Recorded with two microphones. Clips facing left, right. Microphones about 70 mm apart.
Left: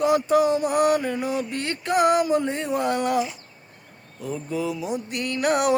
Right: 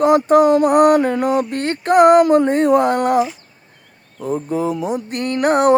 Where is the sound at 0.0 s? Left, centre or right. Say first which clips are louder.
Right 7 dB; right.